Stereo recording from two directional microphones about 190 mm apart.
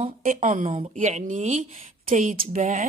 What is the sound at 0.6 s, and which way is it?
A woman's voice, 30° right (ahead or behind).